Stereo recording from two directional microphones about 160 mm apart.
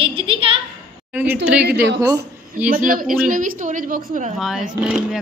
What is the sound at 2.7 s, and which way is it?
A woman's voice, 60° right (ahead or behind).